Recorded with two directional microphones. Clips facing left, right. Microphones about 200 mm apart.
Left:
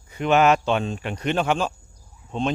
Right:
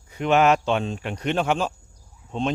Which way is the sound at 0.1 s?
Centre (ahead or behind).